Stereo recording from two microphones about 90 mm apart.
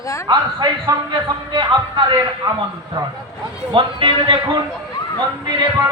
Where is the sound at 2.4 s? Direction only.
45° right (ahead or behind).